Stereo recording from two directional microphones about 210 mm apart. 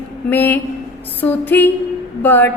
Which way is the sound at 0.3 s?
10° left (ahead or behind).